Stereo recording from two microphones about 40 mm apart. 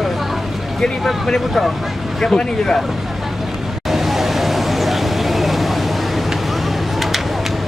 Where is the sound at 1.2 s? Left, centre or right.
Centre.